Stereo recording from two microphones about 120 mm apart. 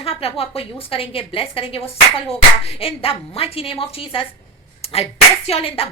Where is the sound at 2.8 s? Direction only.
55° left (ahead or behind).